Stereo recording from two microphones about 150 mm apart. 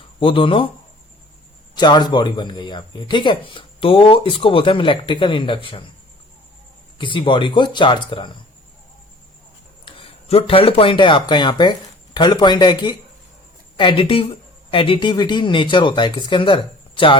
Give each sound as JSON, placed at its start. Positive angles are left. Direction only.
{"t": 0.2, "sound": "speech", "side_deg": 35}
{"t": 1.7, "sound": "speech", "side_deg": 30}
{"t": 7.0, "sound": "speech", "side_deg": 35}
{"t": 9.8, "sound": "speech", "side_deg": 40}